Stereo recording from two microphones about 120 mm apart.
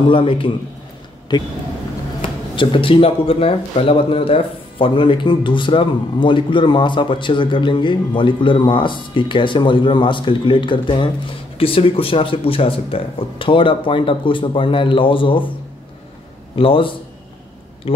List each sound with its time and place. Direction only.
0.1 s speech: 45° left (ahead or behind)
2.5 s speech: 45° left (ahead or behind)
16.5 s speech: 50° left (ahead or behind)